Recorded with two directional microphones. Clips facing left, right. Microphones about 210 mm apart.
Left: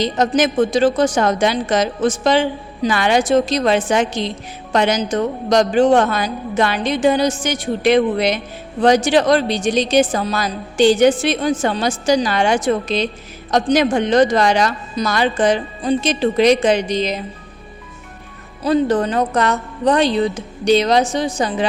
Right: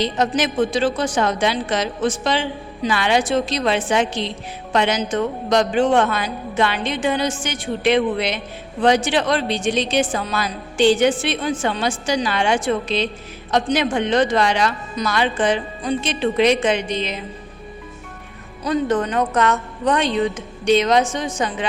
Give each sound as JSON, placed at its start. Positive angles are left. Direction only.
{"t": 0.0, "sound": "a woman's voice", "side_deg": 45}
{"t": 18.6, "sound": "a woman's voice", "side_deg": 35}